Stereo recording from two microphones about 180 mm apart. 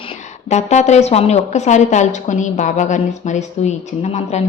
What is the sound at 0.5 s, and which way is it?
A woman's voice, 40° left (ahead or behind).